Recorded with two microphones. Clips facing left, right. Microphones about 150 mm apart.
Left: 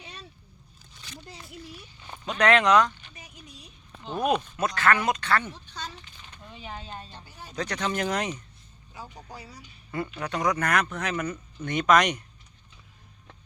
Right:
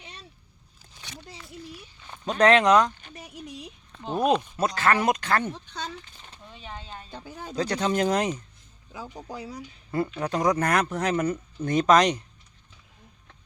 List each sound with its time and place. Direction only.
2.2 s speech: 35° right (ahead or behind)
3.0 s a sound: 60° right (ahead or behind); by 3.7 s 80° right
4.0 s speech: 40° right (ahead or behind)
5.7 s a sound: 60° right (ahead or behind)
6.5 s a sound: 5° left (ahead or behind)
6.7 s a woman's voice: 20° left (ahead or behind)
7.5 s speech: 30° right (ahead or behind)
9.3 s speech: 90° right
10.2 s speech: 30° right (ahead or behind)